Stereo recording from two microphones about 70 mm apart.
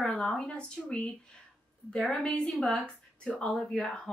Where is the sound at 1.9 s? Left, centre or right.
Centre.